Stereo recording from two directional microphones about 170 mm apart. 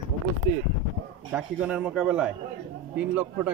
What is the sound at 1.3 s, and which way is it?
A man's voice, 5° right (ahead or behind).